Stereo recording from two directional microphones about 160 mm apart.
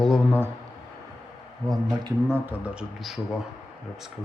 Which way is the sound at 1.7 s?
25° right (ahead or behind).